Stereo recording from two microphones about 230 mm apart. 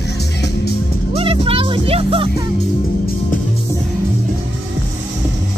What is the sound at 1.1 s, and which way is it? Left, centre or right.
Music, right.